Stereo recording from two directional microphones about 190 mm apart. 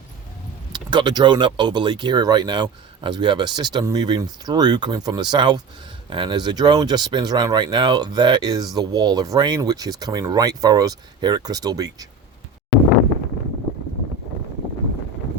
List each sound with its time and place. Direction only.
0.7 s speech: 25° right (ahead or behind)